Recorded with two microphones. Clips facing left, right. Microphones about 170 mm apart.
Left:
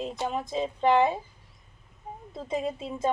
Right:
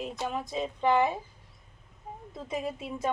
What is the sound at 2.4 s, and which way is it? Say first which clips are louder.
Speech: left 4 dB; 30° left (ahead or behind).